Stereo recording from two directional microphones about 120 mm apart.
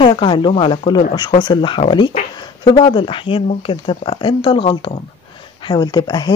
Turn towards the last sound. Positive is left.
turn(degrees=35)  # may be behind; listen again after turning